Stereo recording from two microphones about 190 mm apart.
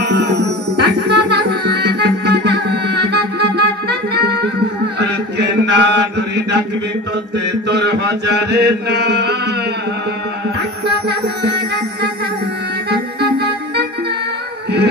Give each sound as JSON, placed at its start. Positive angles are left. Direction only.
{"t": 0.0, "sound": "music", "side_deg": -60}
{"t": 4.9, "sound": "chant", "side_deg": -65}
{"t": 10.9, "sound": "chant", "side_deg": -60}
{"t": 12.9, "sound": "music", "side_deg": -60}